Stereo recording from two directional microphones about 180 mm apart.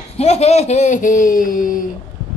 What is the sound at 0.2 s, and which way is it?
Speech, 35° left (ahead or behind).